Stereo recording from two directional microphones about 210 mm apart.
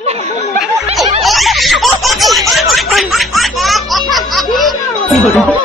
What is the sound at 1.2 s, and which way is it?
Snicker, centre (ahead or behind).